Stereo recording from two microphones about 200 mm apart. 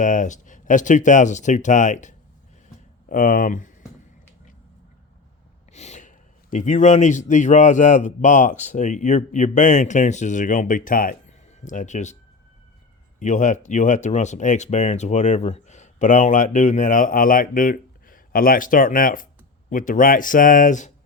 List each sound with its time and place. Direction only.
0.0 s speech: 40° left (ahead or behind)
5.7 s speech: 35° left (ahead or behind)
13.1 s speech: 40° left (ahead or behind)